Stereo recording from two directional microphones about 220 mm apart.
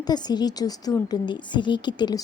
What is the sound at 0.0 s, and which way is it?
A woman's voice, 20° left (ahead or behind).